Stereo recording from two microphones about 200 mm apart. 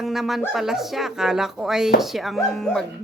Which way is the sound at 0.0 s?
Centre (ahead or behind).